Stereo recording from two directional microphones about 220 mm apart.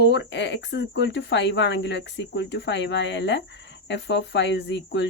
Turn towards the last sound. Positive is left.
turn(degrees=55)  # may be behind; listen again after turning